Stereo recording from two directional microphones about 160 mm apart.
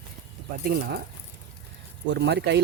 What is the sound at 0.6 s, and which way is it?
Speech, 85° right.